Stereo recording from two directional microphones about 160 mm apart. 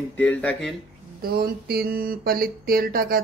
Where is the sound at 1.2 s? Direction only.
70° right (ahead or behind).